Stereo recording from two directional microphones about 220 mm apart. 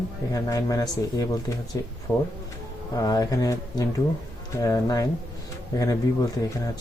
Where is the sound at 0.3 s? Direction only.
15° left (ahead or behind).